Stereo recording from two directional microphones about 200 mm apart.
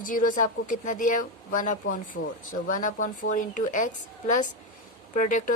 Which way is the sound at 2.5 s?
40° left (ahead or behind).